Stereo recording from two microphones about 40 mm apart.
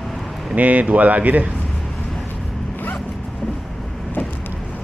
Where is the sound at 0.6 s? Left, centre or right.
Right.